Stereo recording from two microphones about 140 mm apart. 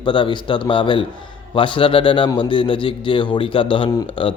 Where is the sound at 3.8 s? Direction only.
25° left (ahead or behind).